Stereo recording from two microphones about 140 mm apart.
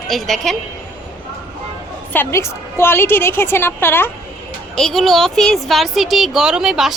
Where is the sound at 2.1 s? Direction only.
15° left (ahead or behind).